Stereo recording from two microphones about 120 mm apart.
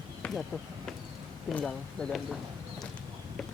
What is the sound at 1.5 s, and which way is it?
Speech, 5° left (ahead or behind).